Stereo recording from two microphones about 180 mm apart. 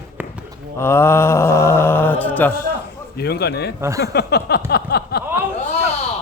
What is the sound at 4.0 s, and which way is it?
Speech, 65° left (ahead or behind).